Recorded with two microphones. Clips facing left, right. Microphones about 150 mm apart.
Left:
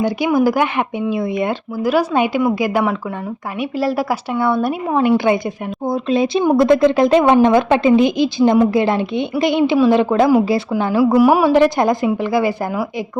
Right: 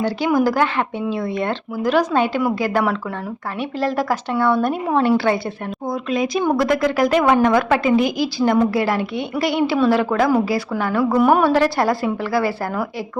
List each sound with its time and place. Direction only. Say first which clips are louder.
0.3 s a woman's voice: left 1 dB; 10° left (ahead or behind)
11.0 s speech: left 3 dB; 10° left (ahead or behind)
11.5 s a woman's voice: left 4 dB; 20° left (ahead or behind)